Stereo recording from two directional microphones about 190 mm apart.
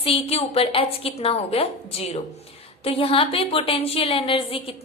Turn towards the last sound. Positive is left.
turn(degrees=30)  # may be behind; listen again after turning